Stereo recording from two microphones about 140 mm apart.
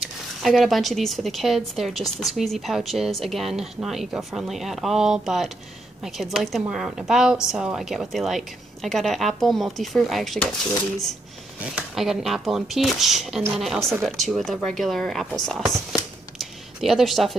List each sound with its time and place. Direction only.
0.0 s speech: centre (ahead or behind)
11.6 s speech: 5° right (ahead or behind)